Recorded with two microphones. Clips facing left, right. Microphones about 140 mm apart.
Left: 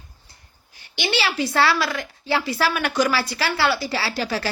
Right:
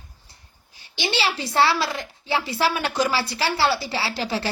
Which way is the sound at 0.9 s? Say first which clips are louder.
Left 2 dB; 30° right (ahead or behind).